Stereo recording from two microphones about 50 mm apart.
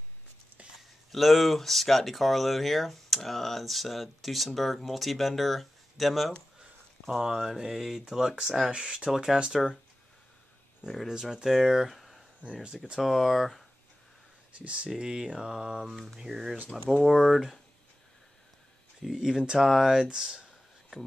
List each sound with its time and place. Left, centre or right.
0.7 s speech: centre
11.0 s speech: centre
14.5 s speech: right; by 17.6 s centre
19.0 s speech: centre